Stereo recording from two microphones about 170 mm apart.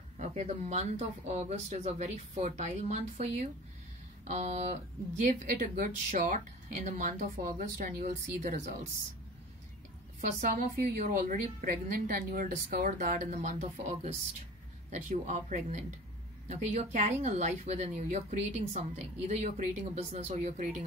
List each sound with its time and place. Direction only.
0.2 s a woman's voice: 40° right (ahead or behind)
8.0 s a woman's voice: 45° right (ahead or behind)
10.2 s a woman's voice: 50° right (ahead or behind)